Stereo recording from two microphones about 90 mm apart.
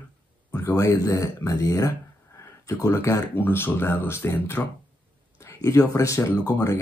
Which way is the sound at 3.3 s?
25° left (ahead or behind).